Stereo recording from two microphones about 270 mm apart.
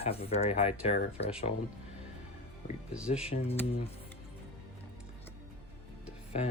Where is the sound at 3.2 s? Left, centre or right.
Left.